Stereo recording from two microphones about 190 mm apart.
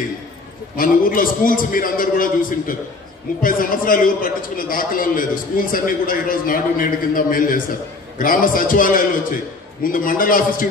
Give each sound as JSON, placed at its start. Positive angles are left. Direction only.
{"t": 0.7, "sound": "a man's voice", "side_deg": 45}